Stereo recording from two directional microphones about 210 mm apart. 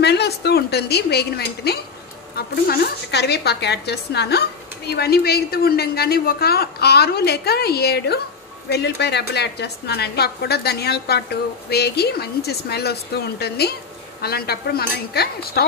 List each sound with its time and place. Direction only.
0.0 s a woman's voice: 50° left (ahead or behind)